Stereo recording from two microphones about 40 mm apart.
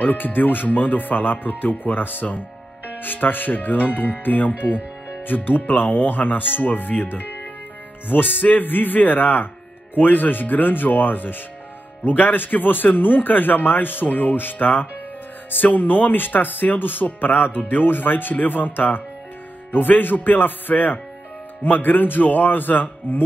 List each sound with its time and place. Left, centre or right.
0.0 s speech: left